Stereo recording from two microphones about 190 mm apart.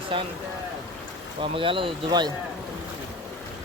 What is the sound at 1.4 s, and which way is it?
Speech, 25° right (ahead or behind).